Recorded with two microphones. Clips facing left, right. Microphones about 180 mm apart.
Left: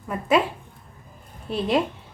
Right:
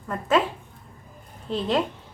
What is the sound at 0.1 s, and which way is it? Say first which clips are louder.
Speech: left 1 dB; 10° left (ahead or behind).